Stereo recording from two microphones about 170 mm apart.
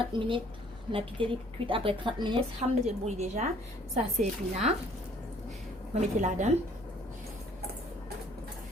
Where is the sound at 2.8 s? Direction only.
40° right (ahead or behind).